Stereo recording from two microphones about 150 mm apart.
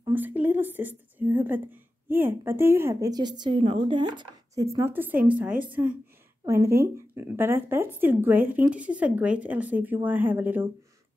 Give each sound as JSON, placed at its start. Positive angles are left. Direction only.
{"t": 0.1, "sound": "speech", "side_deg": -10}
{"t": 4.6, "sound": "speech", "side_deg": -20}